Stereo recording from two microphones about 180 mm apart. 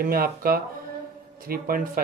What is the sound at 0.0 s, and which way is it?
Speech, 55° right (ahead or behind).